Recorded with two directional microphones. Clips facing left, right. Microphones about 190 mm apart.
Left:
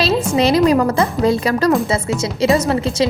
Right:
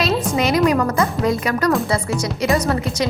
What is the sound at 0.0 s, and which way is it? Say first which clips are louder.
A woman's voice: left 3 dB; 30° left (ahead or behind).